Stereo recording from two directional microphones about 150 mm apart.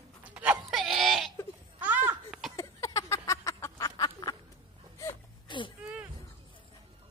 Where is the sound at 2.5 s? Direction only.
20° left (ahead or behind).